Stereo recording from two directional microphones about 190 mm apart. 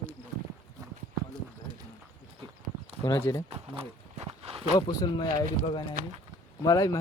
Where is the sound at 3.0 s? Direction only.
15° left (ahead or behind).